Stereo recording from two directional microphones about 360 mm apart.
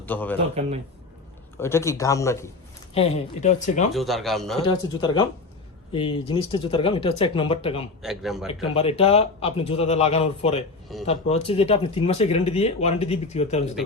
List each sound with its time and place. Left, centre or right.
0.0 s a man's voice: centre
1.5 s speech: centre
3.9 s a man's voice: centre
4.6 s speech: centre
8.0 s a man's voice: centre
8.7 s speech: centre